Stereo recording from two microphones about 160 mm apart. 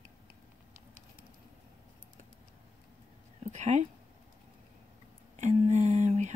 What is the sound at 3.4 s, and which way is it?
Speech, 45° right (ahead or behind).